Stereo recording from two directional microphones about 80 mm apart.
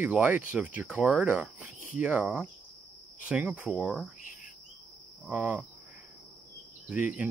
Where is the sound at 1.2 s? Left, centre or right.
Centre.